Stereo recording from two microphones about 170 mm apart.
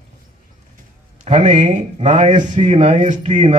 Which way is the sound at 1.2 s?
45° right (ahead or behind).